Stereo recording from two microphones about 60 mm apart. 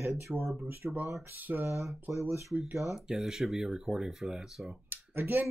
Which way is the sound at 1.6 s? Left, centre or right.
Right.